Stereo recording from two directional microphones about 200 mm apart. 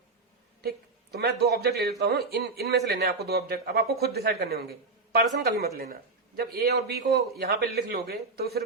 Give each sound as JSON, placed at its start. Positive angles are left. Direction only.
{"t": 0.6, "sound": "speech", "side_deg": -50}